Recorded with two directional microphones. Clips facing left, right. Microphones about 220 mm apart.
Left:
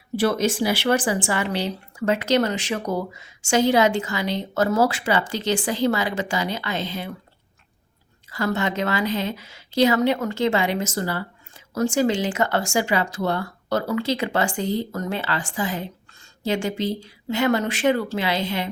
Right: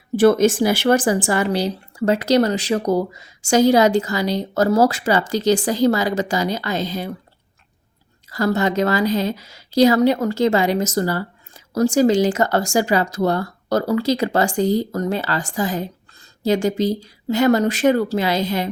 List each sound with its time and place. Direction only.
0.2 s a woman's voice: 50° right (ahead or behind)
8.3 s a woman's voice: 40° right (ahead or behind)